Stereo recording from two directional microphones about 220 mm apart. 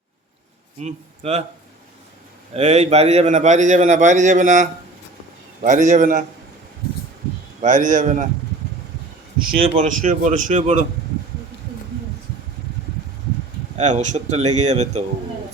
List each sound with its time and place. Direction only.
0.8 s speech: 30° right (ahead or behind)
2.5 s a man's voice: 30° right (ahead or behind)
7.6 s a man's voice: 35° right (ahead or behind)
9.6 s a man's voice: 30° right (ahead or behind)
13.7 s a man's voice: 35° right (ahead or behind)